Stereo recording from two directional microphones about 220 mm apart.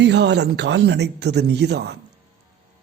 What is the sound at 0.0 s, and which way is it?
Speech, 50° right (ahead or behind).